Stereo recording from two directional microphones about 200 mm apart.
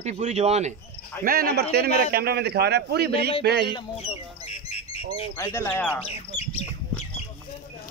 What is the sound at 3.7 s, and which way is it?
Squawk, 25° left (ahead or behind).